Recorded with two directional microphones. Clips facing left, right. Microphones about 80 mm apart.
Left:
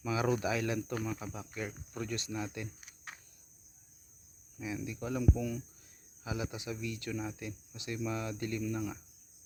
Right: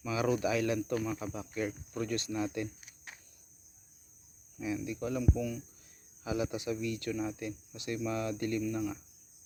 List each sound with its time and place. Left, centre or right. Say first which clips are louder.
0.0 s speech: right 1 dB; left
1.2 s speech: right 5 dB; centre
4.6 s speech: right 4 dB; centre
4.9 s speech: left 2 dB; left
6.2 s speech: right 5 dB; centre
7.1 s speech: right 4 dB; centre